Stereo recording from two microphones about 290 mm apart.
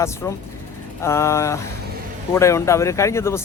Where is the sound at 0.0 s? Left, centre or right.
Centre.